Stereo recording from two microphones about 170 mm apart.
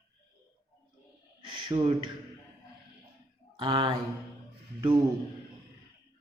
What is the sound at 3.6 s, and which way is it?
Speech, 30° right (ahead or behind).